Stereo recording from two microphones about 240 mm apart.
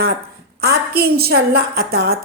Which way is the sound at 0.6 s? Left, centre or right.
Right.